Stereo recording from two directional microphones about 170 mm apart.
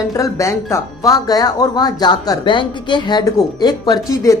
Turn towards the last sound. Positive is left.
turn(degrees=20)  # may be behind; listen again after turning